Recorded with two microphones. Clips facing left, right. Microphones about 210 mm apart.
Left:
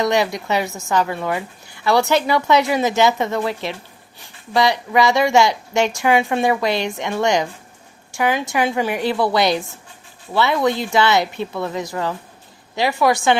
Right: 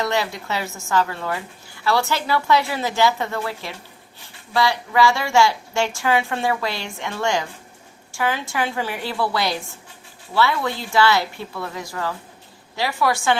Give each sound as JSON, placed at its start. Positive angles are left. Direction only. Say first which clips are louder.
{"t": 0.0, "sound": "a woman's voice", "louder": "left 5 dB", "side_deg": 15}